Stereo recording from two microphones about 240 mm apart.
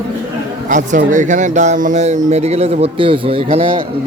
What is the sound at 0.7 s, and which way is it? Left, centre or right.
A man's voice, right.